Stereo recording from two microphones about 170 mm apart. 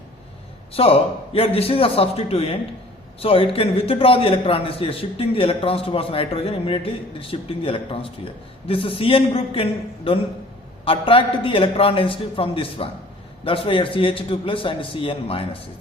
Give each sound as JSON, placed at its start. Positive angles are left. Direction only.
{"t": 0.7, "sound": "a man's voice", "side_deg": 35}